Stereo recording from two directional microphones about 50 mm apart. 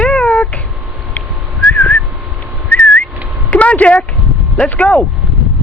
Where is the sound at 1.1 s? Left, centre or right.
Left.